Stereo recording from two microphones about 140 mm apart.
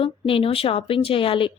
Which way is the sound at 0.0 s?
40° left (ahead or behind).